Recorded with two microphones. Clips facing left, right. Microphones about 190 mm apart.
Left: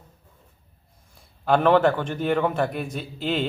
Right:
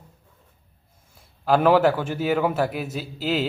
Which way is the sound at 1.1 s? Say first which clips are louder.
Right 1 dB; 5° right (ahead or behind).